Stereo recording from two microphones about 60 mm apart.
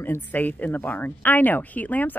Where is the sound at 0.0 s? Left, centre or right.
Left.